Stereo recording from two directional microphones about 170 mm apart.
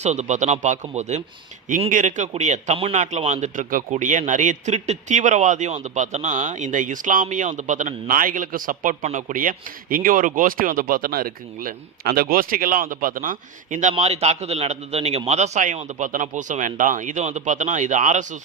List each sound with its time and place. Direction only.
0.0 s a man's voice: 40° right (ahead or behind)